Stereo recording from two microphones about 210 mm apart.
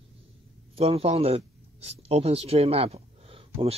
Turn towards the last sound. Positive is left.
turn(degrees=-25)  # may be behind; listen again after turning